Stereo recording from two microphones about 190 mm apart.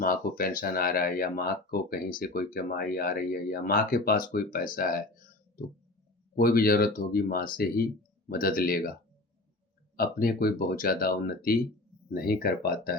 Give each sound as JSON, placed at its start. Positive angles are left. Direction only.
{"t": 0.0, "sound": "speech", "side_deg": 50}
{"t": 6.3, "sound": "speech", "side_deg": 50}
{"t": 10.0, "sound": "speech", "side_deg": 50}